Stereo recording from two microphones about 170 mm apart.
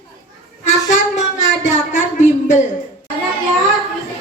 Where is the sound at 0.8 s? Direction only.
45° left (ahead or behind).